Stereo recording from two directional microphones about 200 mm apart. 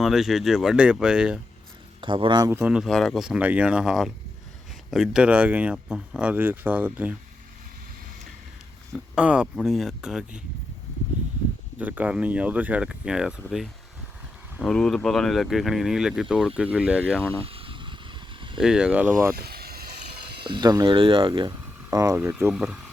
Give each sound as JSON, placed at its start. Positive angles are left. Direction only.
{"t": 0.0, "sound": "speech", "side_deg": 0}
{"t": 2.0, "sound": "speech", "side_deg": -25}
{"t": 9.1, "sound": "speech", "side_deg": -5}
{"t": 11.8, "sound": "speech", "side_deg": -10}
{"t": 14.6, "sound": "speech", "side_deg": 5}
{"t": 17.2, "sound": "speech", "side_deg": 5}
{"t": 17.4, "sound": "vehicle", "side_deg": -30}
{"t": 18.5, "sound": "speech", "side_deg": -5}
{"t": 19.4, "sound": "vehicle", "side_deg": -50}
{"t": 20.5, "sound": "speech", "side_deg": -20}